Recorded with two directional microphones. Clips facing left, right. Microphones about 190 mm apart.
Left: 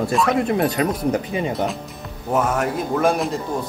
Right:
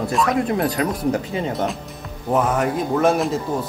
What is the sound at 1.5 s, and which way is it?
A man's voice, centre (ahead or behind).